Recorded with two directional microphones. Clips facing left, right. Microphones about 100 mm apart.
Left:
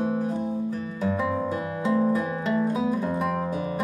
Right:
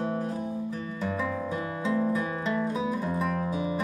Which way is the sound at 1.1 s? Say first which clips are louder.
Left 4 dB; 15° left (ahead or behind).